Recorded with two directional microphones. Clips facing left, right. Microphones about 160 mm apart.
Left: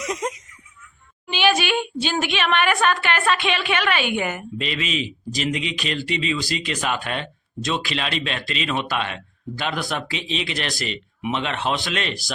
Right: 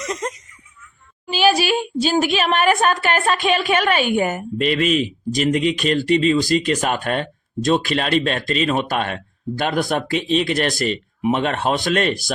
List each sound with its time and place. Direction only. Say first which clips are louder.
0.0 s giggle: right 1 dB; 10° left (ahead or behind)
1.3 s a woman's voice: right 3 dB; 40° right (ahead or behind)